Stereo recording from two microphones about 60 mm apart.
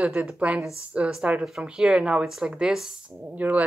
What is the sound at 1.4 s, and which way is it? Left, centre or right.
Speech, centre.